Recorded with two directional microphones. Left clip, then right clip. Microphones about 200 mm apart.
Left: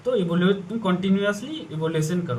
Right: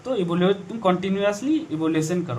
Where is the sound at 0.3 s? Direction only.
25° right (ahead or behind).